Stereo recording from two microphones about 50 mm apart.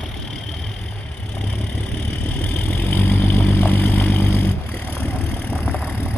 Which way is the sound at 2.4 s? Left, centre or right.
Left.